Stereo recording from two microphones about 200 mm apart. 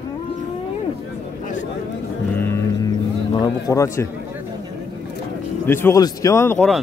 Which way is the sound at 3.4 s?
15° left (ahead or behind).